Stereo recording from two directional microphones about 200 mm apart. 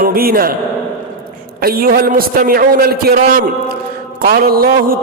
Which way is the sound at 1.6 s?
50° right (ahead or behind).